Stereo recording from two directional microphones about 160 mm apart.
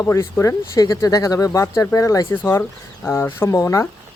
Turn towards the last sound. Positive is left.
turn(degrees=20)  # may be behind; listen again after turning